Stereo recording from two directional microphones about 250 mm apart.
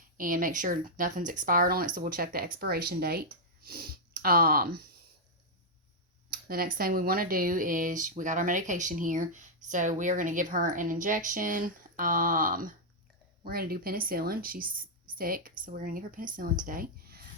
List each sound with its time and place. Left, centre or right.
0.2 s speech: right
6.3 s speech: right